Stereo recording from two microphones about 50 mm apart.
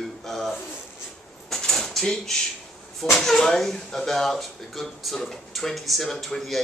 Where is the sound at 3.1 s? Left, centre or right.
Centre.